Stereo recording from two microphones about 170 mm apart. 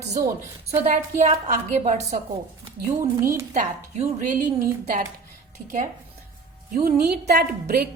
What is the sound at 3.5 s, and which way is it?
Speech, 45° right (ahead or behind).